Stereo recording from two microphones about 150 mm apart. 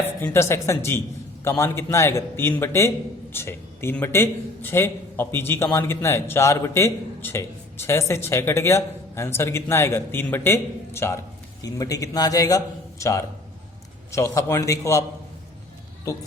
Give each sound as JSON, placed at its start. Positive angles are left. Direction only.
{"t": 0.0, "sound": "a man's voice", "side_deg": 15}